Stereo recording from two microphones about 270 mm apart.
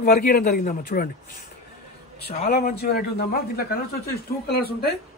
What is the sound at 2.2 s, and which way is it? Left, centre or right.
Speech, left.